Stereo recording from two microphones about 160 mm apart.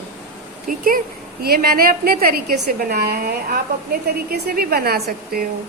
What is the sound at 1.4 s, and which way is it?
A woman's voice, 70° right (ahead or behind).